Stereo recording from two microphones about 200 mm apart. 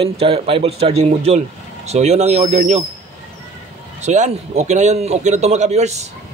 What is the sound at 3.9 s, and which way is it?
Speech, 35° right (ahead or behind).